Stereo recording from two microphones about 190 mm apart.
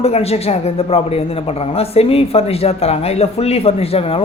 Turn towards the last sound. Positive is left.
turn(degrees=30)  # may be behind; listen again after turning